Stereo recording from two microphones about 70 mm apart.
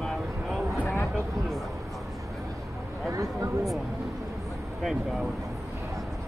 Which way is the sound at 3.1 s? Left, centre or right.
Right.